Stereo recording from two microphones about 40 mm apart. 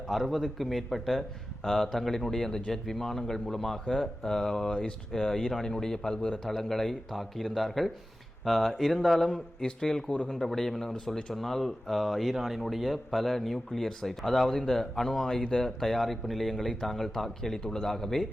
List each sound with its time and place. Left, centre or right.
0.1 s a man's voice: centre
9.6 s a man's voice: centre